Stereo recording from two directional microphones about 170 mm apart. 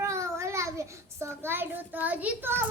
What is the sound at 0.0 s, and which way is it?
Child singing, 15° right (ahead or behind).